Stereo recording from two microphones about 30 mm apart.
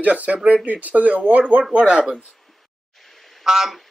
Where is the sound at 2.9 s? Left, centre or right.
Centre.